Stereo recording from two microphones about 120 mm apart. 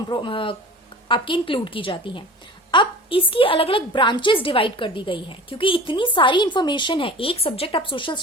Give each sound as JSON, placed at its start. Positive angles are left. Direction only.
{"t": 0.1, "sound": "a woman's voice", "side_deg": 45}